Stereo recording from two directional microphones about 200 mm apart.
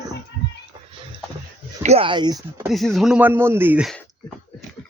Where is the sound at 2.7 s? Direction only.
Centre (ahead or behind).